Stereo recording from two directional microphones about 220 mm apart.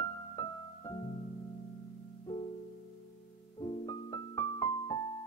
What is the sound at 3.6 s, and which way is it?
Piano, 15° left (ahead or behind).